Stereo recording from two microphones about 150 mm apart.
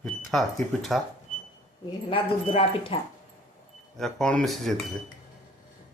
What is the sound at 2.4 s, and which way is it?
Speech, 40° left (ahead or behind).